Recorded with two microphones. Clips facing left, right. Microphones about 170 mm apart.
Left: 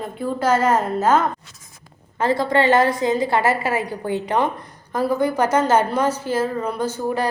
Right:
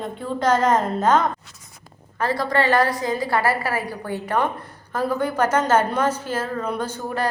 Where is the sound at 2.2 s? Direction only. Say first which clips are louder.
Left 3 dB; 25° left (ahead or behind).